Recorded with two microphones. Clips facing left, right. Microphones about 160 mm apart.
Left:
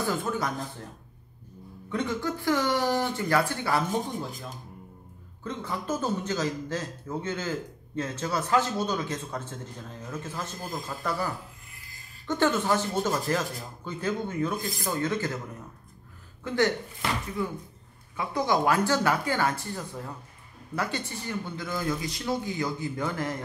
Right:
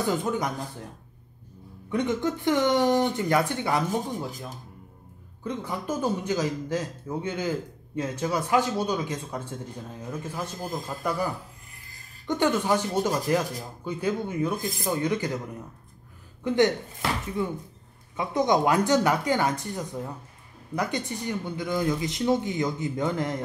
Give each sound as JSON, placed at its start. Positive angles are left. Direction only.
{"t": 0.0, "sound": "speech", "side_deg": -20}
{"t": 1.9, "sound": "speech", "side_deg": -15}
{"t": 5.4, "sound": "a man's voice", "side_deg": -15}
{"t": 12.3, "sound": "a man's voice", "side_deg": -15}
{"t": 16.4, "sound": "speech", "side_deg": -20}